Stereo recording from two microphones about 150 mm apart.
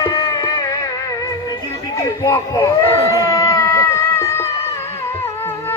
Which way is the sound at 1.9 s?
25° left (ahead or behind).